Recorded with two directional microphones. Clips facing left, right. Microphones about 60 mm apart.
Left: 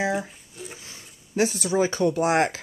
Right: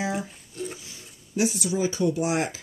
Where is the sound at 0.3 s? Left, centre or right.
Centre.